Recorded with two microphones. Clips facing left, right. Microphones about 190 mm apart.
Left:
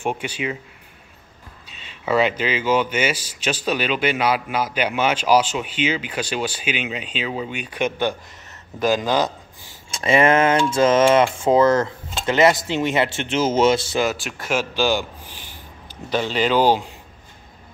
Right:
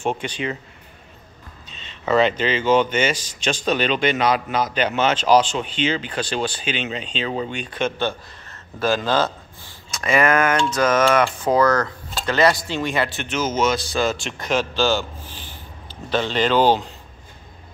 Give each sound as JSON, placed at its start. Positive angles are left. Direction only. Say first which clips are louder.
{"t": 0.0, "sound": "speech", "louder": "right 1 dB", "side_deg": 10}
{"t": 1.7, "sound": "speech", "louder": "right 1 dB", "side_deg": 10}
{"t": 9.8, "sound": "speech", "louder": "left 2 dB", "side_deg": 25}
{"t": 14.0, "sound": "speech", "louder": "right 1 dB", "side_deg": 5}